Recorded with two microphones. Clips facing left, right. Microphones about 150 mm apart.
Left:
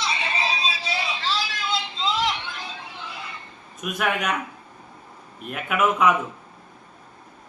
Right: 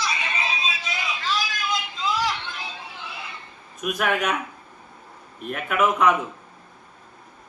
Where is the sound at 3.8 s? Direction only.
Centre (ahead or behind).